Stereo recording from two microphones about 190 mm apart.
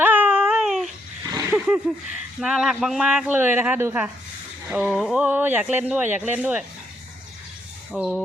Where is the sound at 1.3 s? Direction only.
15° right (ahead or behind).